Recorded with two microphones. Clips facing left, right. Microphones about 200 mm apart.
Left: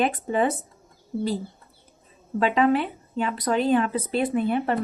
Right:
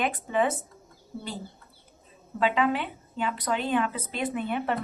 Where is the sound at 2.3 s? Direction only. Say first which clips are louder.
Left 5 dB; 40° left (ahead or behind).